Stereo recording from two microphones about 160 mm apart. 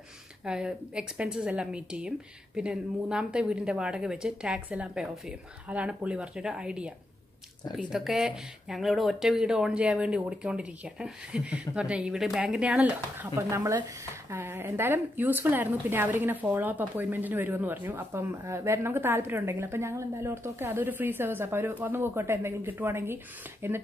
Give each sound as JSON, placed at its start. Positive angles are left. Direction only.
{"t": 0.5, "sound": "speech", "side_deg": -5}
{"t": 7.9, "sound": "speech", "side_deg": -5}
{"t": 13.4, "sound": "a woman's voice", "side_deg": -20}